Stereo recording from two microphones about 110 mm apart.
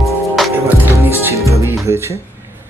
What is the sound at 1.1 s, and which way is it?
Music, 25° right (ahead or behind).